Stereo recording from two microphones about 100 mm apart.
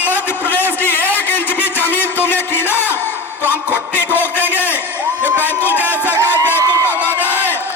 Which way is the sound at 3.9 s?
20° left (ahead or behind).